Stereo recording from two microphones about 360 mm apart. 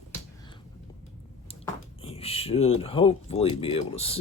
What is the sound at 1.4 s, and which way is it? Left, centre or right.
Speech, centre.